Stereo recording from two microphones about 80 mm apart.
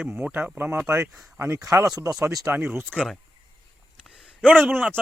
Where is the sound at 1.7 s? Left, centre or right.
Right.